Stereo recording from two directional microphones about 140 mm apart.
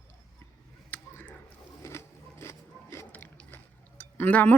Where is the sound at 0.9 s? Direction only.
15° left (ahead or behind).